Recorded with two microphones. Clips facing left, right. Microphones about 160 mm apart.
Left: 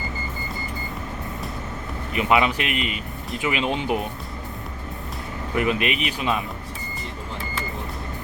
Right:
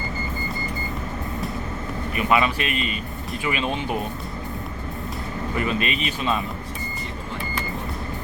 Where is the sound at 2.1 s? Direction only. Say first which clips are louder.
Left 1 dB; 20° left (ahead or behind).